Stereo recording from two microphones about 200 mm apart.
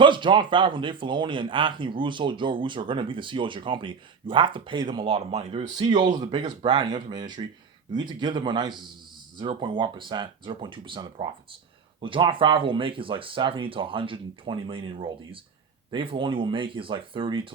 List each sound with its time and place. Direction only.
0.0 s a man's voice: 25° right (ahead or behind)